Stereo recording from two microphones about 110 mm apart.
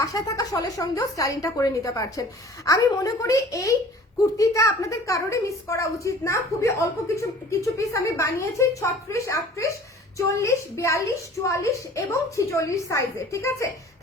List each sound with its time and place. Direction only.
0.0 s a woman's voice: 30° left (ahead or behind)